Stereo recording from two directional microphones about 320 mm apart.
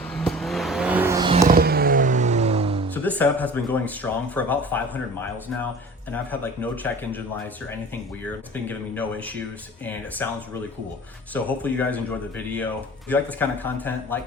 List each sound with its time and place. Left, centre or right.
0.0 s vehicle: centre
2.9 s speech: centre
6.1 s speech: centre